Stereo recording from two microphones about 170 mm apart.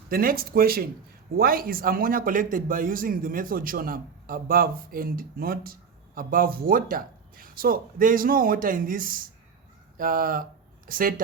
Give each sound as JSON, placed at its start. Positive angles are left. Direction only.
{"t": 0.1, "sound": "a man's voice", "side_deg": -60}